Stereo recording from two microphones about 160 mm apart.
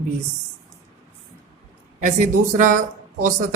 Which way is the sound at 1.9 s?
55° right (ahead or behind).